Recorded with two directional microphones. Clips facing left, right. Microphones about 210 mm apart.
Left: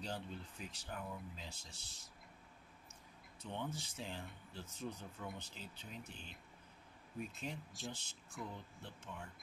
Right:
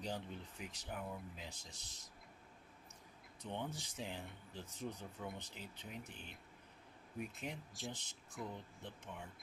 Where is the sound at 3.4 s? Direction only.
15° right (ahead or behind).